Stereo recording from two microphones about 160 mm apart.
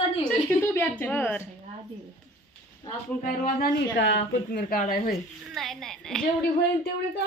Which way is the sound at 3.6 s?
90° left.